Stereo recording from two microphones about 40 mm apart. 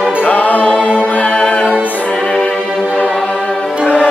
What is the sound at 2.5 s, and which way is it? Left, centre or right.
Music, centre.